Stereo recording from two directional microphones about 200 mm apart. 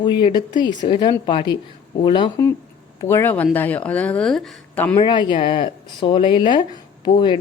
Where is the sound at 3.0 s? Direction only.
10° left (ahead or behind).